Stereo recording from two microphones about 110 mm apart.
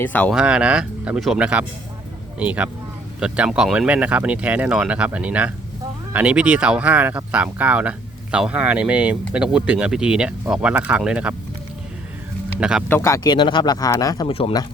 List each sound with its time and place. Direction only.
0.0 s speech: 15° left (ahead or behind)
0.3 s speech: 5° right (ahead or behind)
12.5 s speech: 10° right (ahead or behind)
13.0 s speech: 30° left (ahead or behind)
13.3 s speech: 45° left (ahead or behind)
14.3 s speech: 60° left (ahead or behind)